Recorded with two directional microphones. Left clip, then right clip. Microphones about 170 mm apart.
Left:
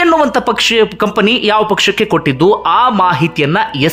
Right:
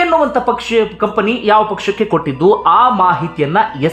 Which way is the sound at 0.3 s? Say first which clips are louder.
Left 3 dB; 25° left (ahead or behind).